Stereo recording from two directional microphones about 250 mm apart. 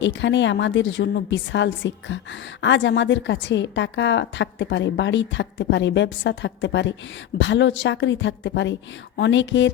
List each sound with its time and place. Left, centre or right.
0.0 s a woman's voice: left